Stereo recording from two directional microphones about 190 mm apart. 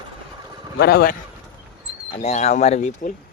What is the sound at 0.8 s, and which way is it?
Speech, 55° left (ahead or behind).